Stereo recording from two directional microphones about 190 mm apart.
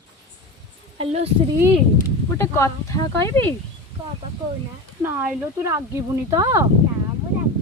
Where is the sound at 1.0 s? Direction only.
35° right (ahead or behind).